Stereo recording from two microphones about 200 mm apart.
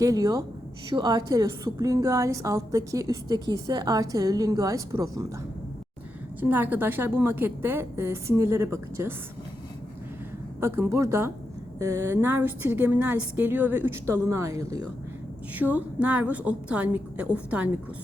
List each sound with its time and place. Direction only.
0.0 s a woman's voice: 15° right (ahead or behind)
6.4 s a woman's voice: 10° right (ahead or behind)
10.6 s a woman's voice: 10° right (ahead or behind)